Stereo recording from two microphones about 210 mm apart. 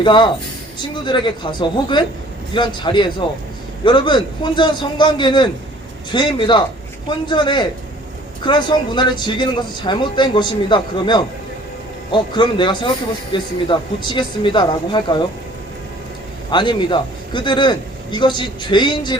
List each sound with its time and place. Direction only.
0.0 s speech: 20° left (ahead or behind)
16.5 s speech: 20° left (ahead or behind)